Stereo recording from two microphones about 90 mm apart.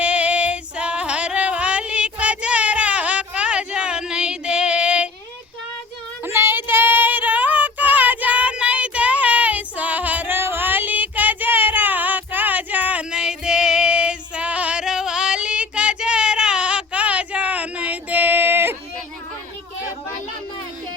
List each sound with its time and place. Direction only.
0.0 s female singing: 15° right (ahead or behind)
6.2 s female singing: 25° right (ahead or behind)